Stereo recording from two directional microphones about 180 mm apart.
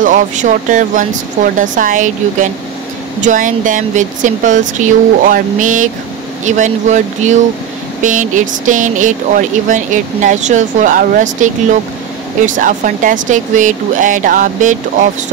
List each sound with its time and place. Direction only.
0.0 s speech: 45° right (ahead or behind)